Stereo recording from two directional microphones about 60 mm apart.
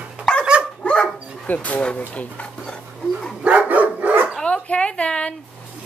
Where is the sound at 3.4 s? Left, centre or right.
Right.